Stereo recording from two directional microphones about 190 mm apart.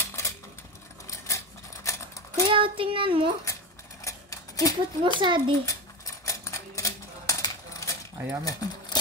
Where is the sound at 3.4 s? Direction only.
15° left (ahead or behind).